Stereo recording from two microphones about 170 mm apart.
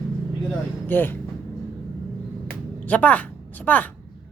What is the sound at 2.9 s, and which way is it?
Speech, 10° left (ahead or behind).